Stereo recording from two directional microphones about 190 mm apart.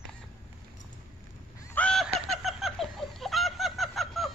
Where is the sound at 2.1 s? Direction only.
Centre (ahead or behind).